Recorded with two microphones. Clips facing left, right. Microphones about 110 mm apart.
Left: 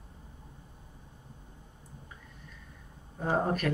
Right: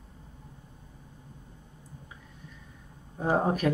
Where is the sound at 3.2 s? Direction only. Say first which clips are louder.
Right 3 dB; 15° right (ahead or behind).